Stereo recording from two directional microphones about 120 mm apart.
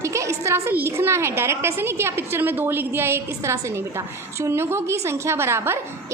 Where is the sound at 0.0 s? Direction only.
25° right (ahead or behind).